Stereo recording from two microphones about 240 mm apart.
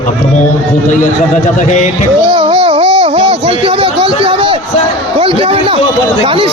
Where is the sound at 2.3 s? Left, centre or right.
Right.